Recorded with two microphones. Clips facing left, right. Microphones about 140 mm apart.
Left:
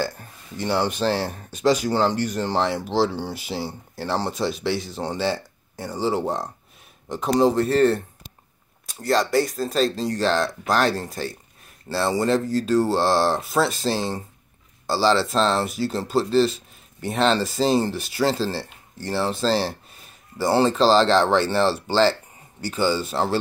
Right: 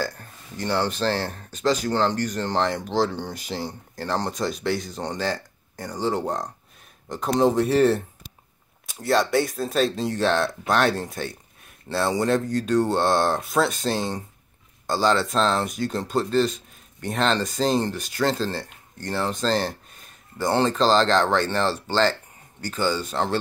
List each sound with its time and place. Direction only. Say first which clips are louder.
0.0 s speech: left 2 dB; 10° left (ahead or behind)